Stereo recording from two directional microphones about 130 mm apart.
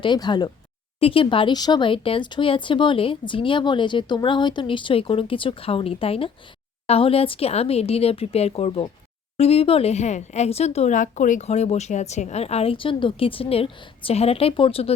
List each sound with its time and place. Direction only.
0.0 s speech: 35° left (ahead or behind)
0.9 s speech: 45° left (ahead or behind)